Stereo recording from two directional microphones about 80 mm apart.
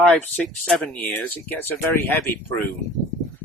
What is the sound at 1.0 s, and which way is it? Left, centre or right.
Speech, left.